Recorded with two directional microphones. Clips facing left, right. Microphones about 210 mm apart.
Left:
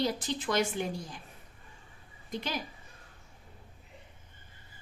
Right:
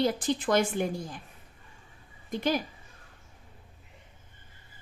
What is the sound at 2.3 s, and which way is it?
Speech, 50° right (ahead or behind).